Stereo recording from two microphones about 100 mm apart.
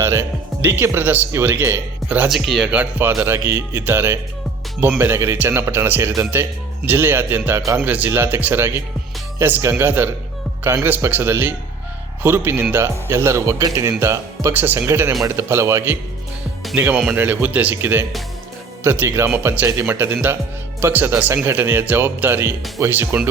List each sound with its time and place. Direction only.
0.0 s speech: 25° right (ahead or behind)
2.0 s speech: 15° right (ahead or behind)